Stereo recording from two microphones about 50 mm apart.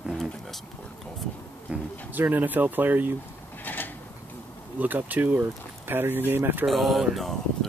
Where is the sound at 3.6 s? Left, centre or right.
Left.